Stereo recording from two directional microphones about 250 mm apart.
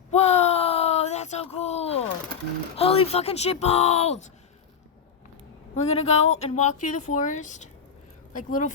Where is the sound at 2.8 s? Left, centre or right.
Left.